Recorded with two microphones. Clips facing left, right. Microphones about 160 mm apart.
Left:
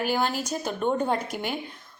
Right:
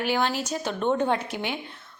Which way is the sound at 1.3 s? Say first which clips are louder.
Even; 45° left (ahead or behind).